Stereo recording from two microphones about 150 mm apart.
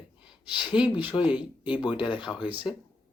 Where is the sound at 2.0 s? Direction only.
35° left (ahead or behind).